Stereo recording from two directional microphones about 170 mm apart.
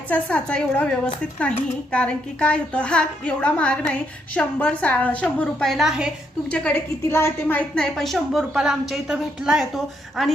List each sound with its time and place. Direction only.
0.1 s speech: 10° left (ahead or behind)
6.5 s a woman's voice: 10° left (ahead or behind)